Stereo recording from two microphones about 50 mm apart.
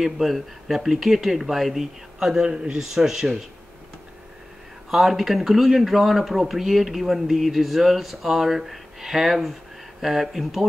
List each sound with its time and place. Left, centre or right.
0.0 s a man's voice: centre
4.9 s a man's voice: centre